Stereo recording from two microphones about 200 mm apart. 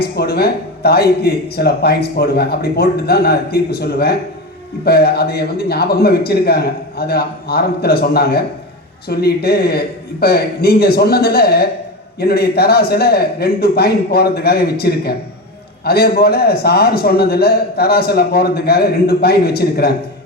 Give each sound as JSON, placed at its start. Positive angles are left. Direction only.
{"t": 0.0, "sound": "a man's voice", "side_deg": 50}